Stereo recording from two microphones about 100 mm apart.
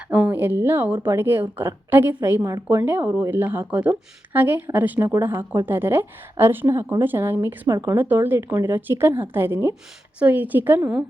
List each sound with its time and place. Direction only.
0.1 s a woman's voice: 15° right (ahead or behind)